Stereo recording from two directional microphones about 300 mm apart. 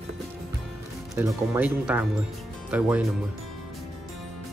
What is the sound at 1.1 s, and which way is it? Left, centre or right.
Speech, centre.